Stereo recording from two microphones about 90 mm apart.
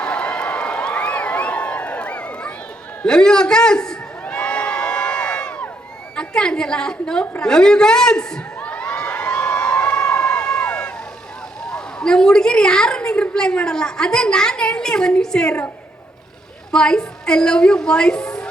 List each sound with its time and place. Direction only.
0.0 s a sound: 10° left (ahead or behind)
3.0 s a man's voice: 10° left (ahead or behind)
4.2 s crowd: 15° left (ahead or behind)
6.1 s a sound: 10° left (ahead or behind)
11.7 s a woman's voice: 10° left (ahead or behind)
16.7 s a woman's voice: 10° left (ahead or behind)